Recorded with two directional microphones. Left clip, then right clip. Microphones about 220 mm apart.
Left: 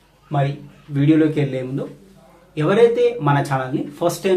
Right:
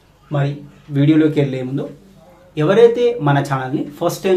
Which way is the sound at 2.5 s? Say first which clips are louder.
Right 3 dB; 10° right (ahead or behind).